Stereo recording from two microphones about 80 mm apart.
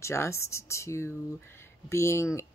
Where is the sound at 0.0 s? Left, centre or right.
Left.